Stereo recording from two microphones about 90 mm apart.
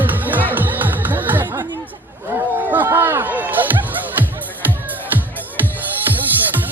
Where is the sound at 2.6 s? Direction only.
20° right (ahead or behind).